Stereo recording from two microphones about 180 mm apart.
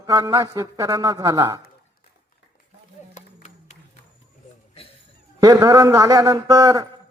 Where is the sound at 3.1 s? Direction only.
40° left (ahead or behind).